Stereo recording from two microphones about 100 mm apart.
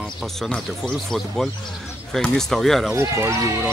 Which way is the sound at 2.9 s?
25° right (ahead or behind).